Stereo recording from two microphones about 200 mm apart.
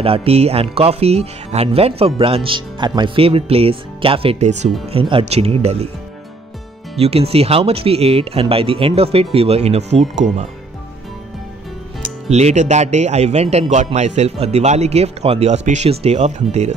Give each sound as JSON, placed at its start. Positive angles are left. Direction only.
{"t": 0.0, "sound": "speech", "side_deg": -30}
{"t": 7.0, "sound": "speech", "side_deg": -30}
{"t": 12.3, "sound": "speech", "side_deg": -35}